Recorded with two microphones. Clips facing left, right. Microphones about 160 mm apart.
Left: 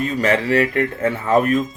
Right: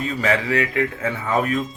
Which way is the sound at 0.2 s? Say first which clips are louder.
Left 4 dB; 35° left (ahead or behind).